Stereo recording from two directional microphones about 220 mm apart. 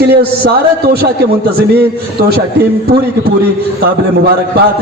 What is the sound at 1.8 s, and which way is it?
Speech, 45° right (ahead or behind).